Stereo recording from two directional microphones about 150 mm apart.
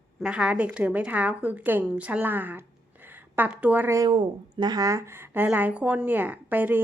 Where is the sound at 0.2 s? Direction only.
5° right (ahead or behind).